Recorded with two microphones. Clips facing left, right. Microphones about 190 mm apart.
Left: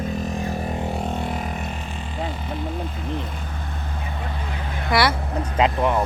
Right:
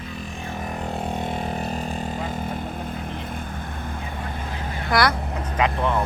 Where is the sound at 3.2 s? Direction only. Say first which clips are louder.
Right 1 dB; 50° right (ahead or behind).